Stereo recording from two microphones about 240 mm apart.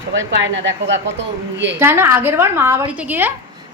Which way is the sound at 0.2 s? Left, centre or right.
Right.